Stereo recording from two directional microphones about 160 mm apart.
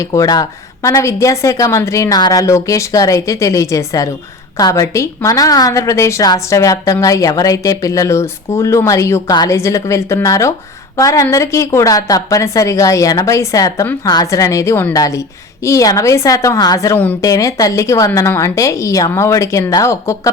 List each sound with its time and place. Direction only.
0.0 s a woman's voice: 20° left (ahead or behind)